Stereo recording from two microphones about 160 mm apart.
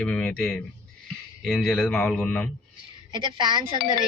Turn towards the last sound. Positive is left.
turn(degrees=-30)  # may be behind; listen again after turning